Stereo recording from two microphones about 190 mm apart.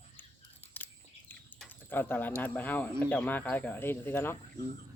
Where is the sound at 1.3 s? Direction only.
10° left (ahead or behind).